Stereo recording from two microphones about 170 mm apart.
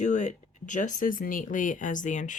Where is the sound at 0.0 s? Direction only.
45° left (ahead or behind).